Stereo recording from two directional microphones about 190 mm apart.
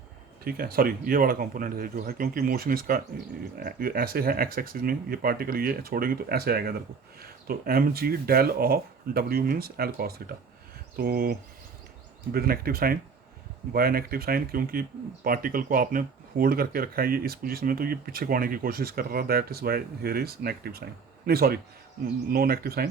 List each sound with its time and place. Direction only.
0.4 s speech: 50° right (ahead or behind)